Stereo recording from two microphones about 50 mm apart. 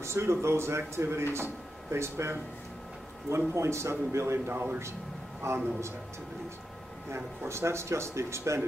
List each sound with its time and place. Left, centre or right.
0.0 s a man's voice: right
5.4 s speech: right
7.4 s speech: right